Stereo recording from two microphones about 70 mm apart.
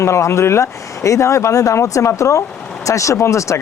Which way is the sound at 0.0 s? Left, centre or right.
Left.